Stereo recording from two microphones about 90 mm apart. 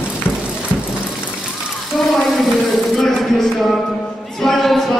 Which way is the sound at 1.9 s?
Centre (ahead or behind).